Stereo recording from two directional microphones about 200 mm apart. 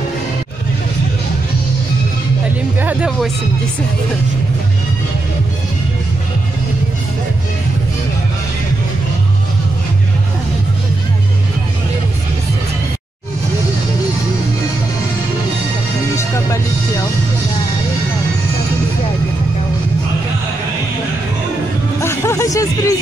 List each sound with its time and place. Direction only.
2.8 s speech: 5° right (ahead or behind)
22.0 s music: 15° left (ahead or behind)